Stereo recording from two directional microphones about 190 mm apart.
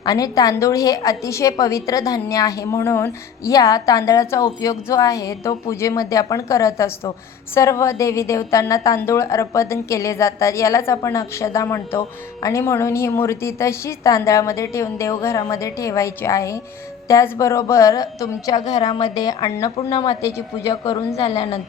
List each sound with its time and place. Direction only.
0.0 s a woman's voice: 20° left (ahead or behind)
18.6 s a woman's voice: 35° left (ahead or behind)
19.1 s a woman's voice: 20° left (ahead or behind)
21.2 s a woman's voice: 35° left (ahead or behind)